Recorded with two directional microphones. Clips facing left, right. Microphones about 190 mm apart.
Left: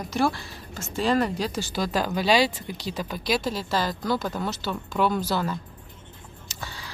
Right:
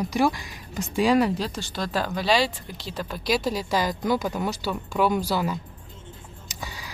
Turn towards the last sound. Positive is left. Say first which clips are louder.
# right 1 dB
turn(degrees=-15)  # may be behind; listen again after turning